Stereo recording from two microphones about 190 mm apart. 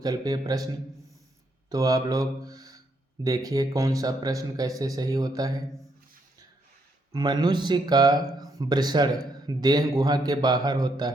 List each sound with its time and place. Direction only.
0.0 s speech: 20° right (ahead or behind)
1.7 s speech: 20° right (ahead or behind)
7.1 s speech: 20° right (ahead or behind)